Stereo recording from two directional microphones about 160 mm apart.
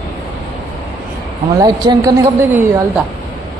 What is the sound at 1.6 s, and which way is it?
Speech, 25° right (ahead or behind).